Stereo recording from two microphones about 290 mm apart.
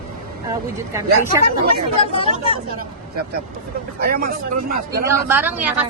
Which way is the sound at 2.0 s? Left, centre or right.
Centre.